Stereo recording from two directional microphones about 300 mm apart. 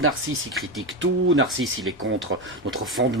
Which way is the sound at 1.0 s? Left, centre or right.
Right.